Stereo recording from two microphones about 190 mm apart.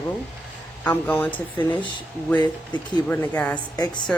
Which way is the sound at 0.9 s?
10° left (ahead or behind).